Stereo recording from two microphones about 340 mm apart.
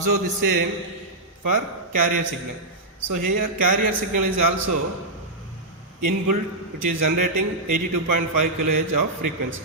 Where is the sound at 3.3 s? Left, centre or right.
Right.